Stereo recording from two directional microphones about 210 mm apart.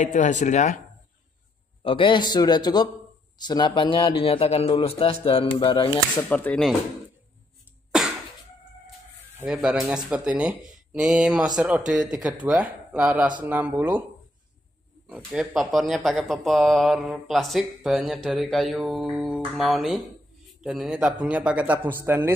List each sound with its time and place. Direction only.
0.0 s speech: 35° left (ahead or behind)
1.8 s a man's voice: 25° left (ahead or behind)
6.2 s speech: 5° left (ahead or behind)
9.4 s a man's voice: 5° right (ahead or behind)
15.0 s a man's voice: 5° right (ahead or behind)